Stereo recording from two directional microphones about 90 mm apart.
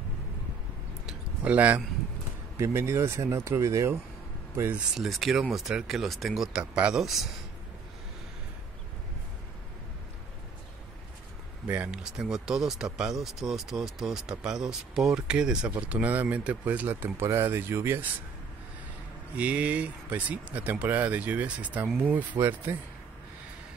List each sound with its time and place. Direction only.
1.0 s a sound: 15° right (ahead or behind)
2.6 s speech: 30° right (ahead or behind)
4.9 s speech: centre (ahead or behind)
11.6 s speech: 15° right (ahead or behind)
19.3 s speech: 15° right (ahead or behind)